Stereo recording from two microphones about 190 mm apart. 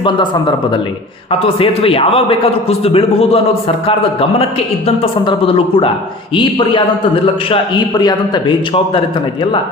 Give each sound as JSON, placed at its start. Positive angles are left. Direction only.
{"t": 1.3, "sound": "a man's voice", "side_deg": 30}